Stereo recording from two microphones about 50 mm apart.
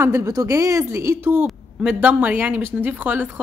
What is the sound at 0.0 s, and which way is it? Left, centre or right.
Speech, right.